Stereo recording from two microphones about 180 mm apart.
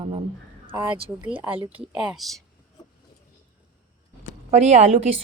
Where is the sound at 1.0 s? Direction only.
30° right (ahead or behind).